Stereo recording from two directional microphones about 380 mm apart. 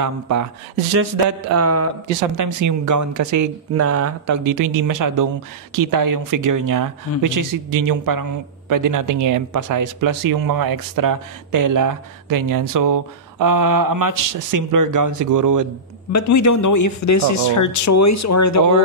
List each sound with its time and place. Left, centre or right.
0.0 s speech: right
1.4 s a sound: right
2.3 s a woman's voice: right
16.1 s speech: left